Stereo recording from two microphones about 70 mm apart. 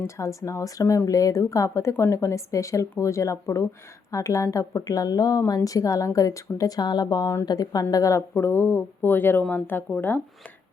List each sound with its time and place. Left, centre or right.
0.2 s a woman's voice: left
7.4 s a woman's voice: left
8.4 s a woman's voice: left